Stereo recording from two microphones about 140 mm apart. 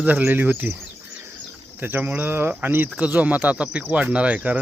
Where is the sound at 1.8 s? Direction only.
15° right (ahead or behind).